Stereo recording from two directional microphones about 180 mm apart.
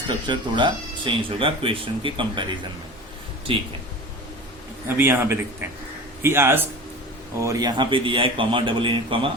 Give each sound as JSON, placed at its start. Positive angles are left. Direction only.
{"t": 0.1, "sound": "speech", "side_deg": -25}
{"t": 3.5, "sound": "speech", "side_deg": -30}
{"t": 4.9, "sound": "a man's voice", "side_deg": -10}